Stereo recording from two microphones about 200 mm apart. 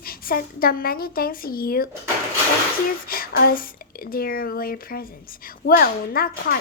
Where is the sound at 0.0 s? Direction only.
45° left (ahead or behind).